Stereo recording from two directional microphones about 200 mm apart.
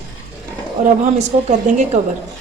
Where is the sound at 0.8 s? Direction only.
40° right (ahead or behind).